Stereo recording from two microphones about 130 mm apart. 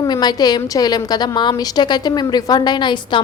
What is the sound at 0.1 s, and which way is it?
A woman's voice, 35° left (ahead or behind).